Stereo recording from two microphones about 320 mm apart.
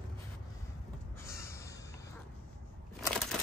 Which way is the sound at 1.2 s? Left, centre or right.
Centre.